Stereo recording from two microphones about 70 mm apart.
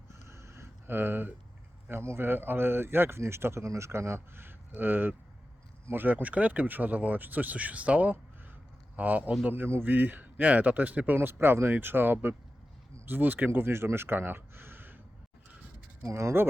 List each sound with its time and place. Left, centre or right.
0.3 s a sound: right
1.9 s a man's voice: right
16.0 s speech: right